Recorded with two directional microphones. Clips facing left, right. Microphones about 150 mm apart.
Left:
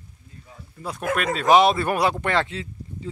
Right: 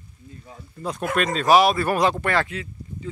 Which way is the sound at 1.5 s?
25° left (ahead or behind).